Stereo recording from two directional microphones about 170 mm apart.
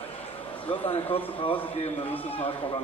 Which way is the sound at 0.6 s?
30° left (ahead or behind).